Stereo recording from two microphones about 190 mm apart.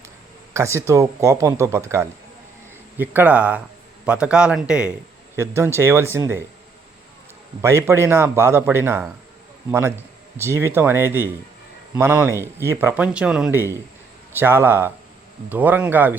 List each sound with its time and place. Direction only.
0.5 s a man's voice: 15° right (ahead or behind)
7.6 s speech: 15° right (ahead or behind)